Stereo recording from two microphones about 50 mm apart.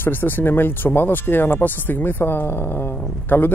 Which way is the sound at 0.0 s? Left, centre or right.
Left.